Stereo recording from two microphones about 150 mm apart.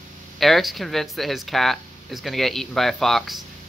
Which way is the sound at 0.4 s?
Centre (ahead or behind).